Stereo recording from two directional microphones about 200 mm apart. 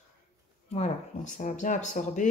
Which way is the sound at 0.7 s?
35° left (ahead or behind).